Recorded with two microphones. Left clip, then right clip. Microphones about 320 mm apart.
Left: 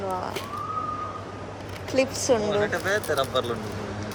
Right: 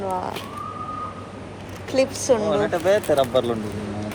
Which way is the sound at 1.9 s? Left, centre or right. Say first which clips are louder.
Right 3 dB; centre.